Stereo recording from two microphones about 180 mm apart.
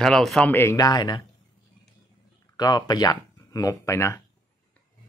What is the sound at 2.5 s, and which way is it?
Speech, 20° left (ahead or behind).